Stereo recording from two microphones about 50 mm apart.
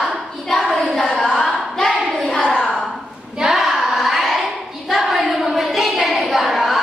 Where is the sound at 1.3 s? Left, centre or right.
Centre.